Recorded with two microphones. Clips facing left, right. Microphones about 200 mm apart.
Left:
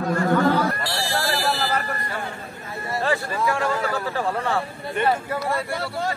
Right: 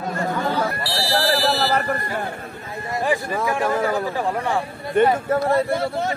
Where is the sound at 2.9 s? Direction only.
15° right (ahead or behind).